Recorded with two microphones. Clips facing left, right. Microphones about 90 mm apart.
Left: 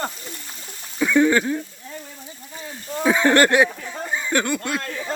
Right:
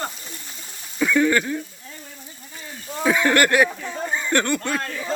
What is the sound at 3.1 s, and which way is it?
Speech, 25° left (ahead or behind).